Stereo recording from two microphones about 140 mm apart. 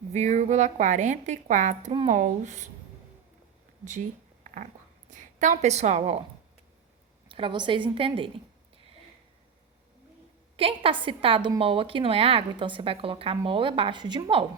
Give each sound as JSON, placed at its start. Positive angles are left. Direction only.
{"t": 0.1, "sound": "a woman's voice", "side_deg": -55}
{"t": 4.4, "sound": "a sound", "side_deg": -65}
{"t": 5.1, "sound": "a woman's voice", "side_deg": -65}
{"t": 7.3, "sound": "a woman's voice", "side_deg": -40}
{"t": 10.6, "sound": "a woman's voice", "side_deg": -40}